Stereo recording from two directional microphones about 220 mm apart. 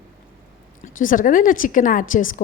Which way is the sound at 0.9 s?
35° left (ahead or behind).